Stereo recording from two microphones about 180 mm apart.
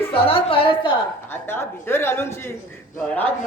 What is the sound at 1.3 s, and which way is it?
A woman's voice, 15° left (ahead or behind).